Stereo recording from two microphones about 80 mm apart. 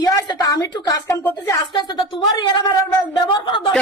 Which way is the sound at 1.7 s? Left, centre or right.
Left.